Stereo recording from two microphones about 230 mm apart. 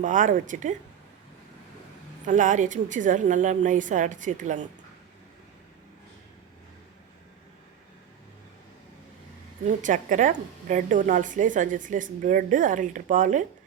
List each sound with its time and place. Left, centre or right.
0.0 s a woman's voice: right
2.2 s a woman's voice: right
9.6 s a woman's voice: right